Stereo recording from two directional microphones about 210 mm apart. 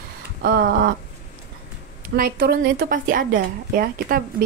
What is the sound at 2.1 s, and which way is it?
A woman's voice, 45° right (ahead or behind).